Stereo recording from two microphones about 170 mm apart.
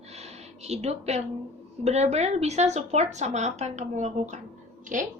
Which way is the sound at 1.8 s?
40° right (ahead or behind).